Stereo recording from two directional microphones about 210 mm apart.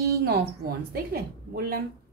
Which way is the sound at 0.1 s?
45° right (ahead or behind).